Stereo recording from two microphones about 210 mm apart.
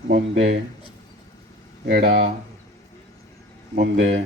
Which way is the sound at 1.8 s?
45° right (ahead or behind).